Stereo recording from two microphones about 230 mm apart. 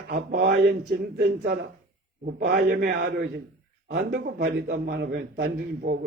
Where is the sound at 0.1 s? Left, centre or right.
Right.